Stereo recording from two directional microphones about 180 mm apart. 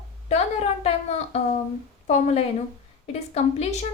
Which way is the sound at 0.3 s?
35° left (ahead or behind).